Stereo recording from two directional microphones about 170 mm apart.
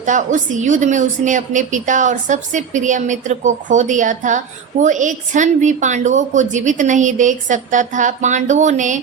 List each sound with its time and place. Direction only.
0.0 s a woman's voice: 45° right (ahead or behind)